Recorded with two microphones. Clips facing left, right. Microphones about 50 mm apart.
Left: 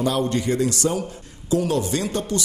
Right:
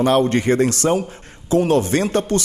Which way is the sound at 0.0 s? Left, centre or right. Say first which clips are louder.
Right 6 dB; right.